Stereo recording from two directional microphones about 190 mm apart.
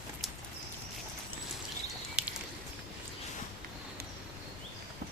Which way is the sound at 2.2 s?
5° right (ahead or behind).